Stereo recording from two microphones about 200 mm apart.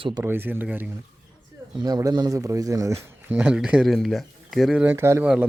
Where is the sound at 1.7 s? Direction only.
20° right (ahead or behind).